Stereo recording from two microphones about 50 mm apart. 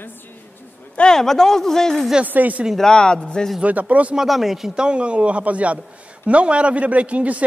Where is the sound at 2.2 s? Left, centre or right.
Right.